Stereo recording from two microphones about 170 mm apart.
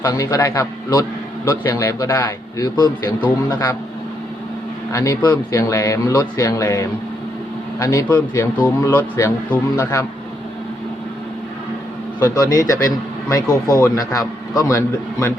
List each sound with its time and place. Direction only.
0.0 s a man's voice: 20° left (ahead or behind)
4.9 s a man's voice: 15° left (ahead or behind)
12.2 s speech: 20° left (ahead or behind)